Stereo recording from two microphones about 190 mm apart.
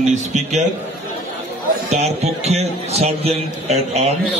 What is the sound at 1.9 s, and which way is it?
A man's voice, 35° right (ahead or behind).